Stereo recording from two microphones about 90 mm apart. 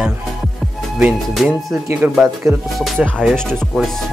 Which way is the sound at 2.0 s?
20° right (ahead or behind).